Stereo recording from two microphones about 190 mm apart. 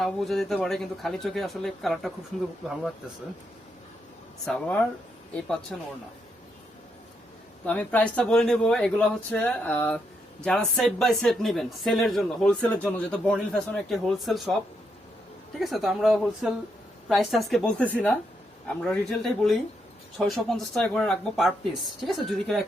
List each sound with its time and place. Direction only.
0.0 s speech: centre (ahead or behind)
4.4 s speech: 5° left (ahead or behind)
7.6 s speech: 10° left (ahead or behind)
15.5 s speech: centre (ahead or behind)